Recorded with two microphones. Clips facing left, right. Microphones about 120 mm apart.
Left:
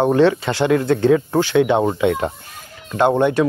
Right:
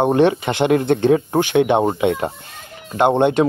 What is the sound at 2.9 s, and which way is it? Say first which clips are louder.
Speech: right 1 dB; 20° right (ahead or behind).